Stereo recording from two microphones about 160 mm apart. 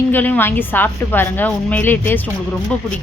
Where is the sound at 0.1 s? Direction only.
10° left (ahead or behind).